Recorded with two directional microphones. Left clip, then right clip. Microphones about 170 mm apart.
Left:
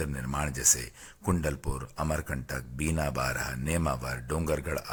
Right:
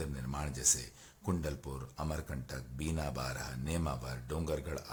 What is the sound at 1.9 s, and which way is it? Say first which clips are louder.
Speech: left 10 dB; 30° left (ahead or behind).